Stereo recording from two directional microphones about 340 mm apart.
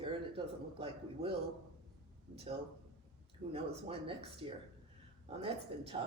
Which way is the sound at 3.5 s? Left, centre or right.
Centre.